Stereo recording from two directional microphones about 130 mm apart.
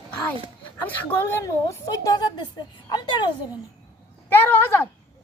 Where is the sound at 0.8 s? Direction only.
15° left (ahead or behind); by 3.2 s 35° left (ahead or behind).